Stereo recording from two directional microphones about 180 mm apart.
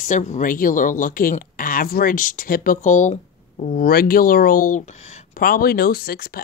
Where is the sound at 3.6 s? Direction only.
55° left (ahead or behind).